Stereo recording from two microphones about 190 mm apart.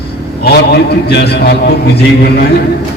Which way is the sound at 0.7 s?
60° left (ahead or behind).